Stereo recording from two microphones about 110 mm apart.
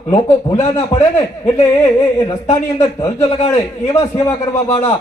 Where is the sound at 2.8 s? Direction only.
30° left (ahead or behind).